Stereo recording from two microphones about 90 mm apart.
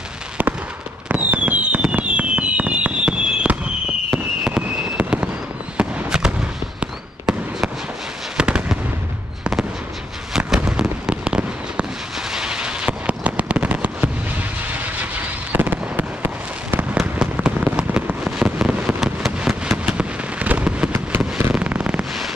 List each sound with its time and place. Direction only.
0.4 s fireworks: 20° right (ahead or behind)